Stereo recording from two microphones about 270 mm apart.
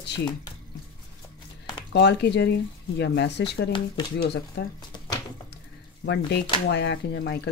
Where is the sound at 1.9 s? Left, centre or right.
Left.